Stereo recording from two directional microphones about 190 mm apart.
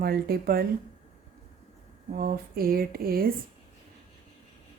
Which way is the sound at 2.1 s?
50° right (ahead or behind).